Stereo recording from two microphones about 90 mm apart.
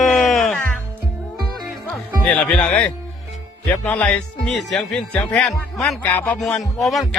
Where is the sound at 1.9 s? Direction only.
15° left (ahead or behind).